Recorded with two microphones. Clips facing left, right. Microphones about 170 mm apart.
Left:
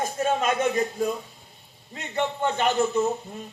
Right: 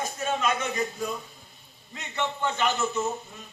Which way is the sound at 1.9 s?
50° left (ahead or behind).